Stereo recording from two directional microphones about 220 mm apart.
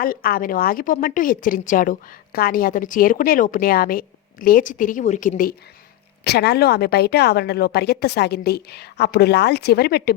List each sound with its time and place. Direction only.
0.0 s a woman's voice: 40° left (ahead or behind)